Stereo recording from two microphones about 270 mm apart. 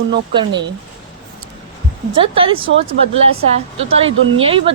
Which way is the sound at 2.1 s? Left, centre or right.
Centre.